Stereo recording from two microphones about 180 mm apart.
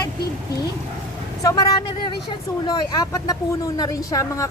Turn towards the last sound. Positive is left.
turn(degrees=20)  # may be behind; listen again after turning